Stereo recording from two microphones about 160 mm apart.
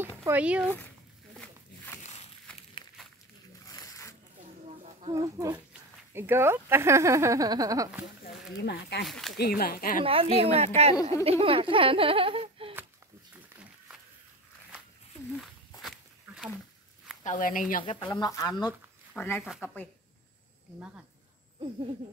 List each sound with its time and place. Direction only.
0.0 s speech: 15° right (ahead or behind)
2.5 s a sound: 5° left (ahead or behind)
3.6 s zipper: 20° left (ahead or behind)
5.1 s speech: 20° right (ahead or behind)
8.5 s speech: 90° left
9.0 s speech: centre (ahead or behind)
9.4 s speech: 70° left (ahead or behind)
10.0 s speech: 35° right (ahead or behind)
13.3 s a sound: 5° right (ahead or behind)
17.4 s speech: 60° left (ahead or behind)
17.8 s speech: 25° left (ahead or behind); by 19.9 s 10° left (ahead or behind)